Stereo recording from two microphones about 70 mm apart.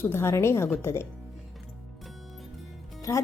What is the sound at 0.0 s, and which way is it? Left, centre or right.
A woman's voice, left.